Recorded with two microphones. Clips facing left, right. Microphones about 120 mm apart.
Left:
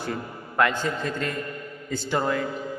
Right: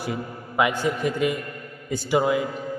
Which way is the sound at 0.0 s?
10° right (ahead or behind).